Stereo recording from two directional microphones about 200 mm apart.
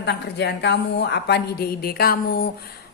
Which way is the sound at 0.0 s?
55° left (ahead or behind).